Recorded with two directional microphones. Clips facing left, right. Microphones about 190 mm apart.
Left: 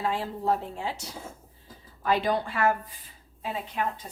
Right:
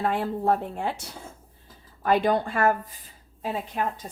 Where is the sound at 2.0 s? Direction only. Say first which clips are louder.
Right 4 dB; 50° right (ahead or behind).